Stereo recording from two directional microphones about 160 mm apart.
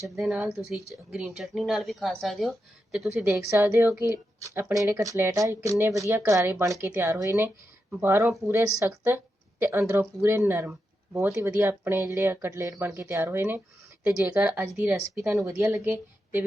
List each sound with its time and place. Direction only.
0.2 s a woman's voice: 5° right (ahead or behind)